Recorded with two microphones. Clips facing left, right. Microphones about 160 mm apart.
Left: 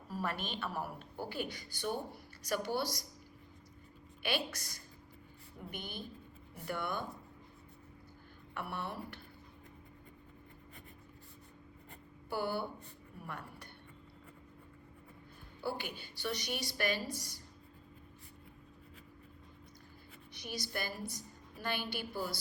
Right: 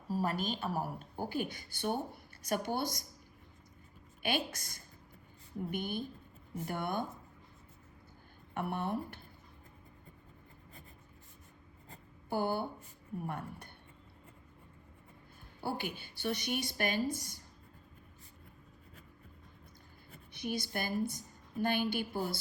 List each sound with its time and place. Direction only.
0.1 s a woman's voice: 40° right (ahead or behind)
4.2 s a woman's voice: 50° right (ahead or behind)
8.5 s a woman's voice: 50° right (ahead or behind)
12.3 s a woman's voice: 50° right (ahead or behind)
15.6 s a woman's voice: 50° right (ahead or behind)
20.3 s a woman's voice: 55° right (ahead or behind)